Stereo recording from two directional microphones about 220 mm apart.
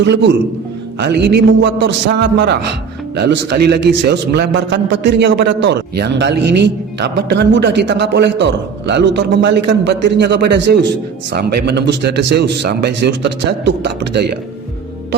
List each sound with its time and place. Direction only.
0.0 s a man's voice: 50° right (ahead or behind)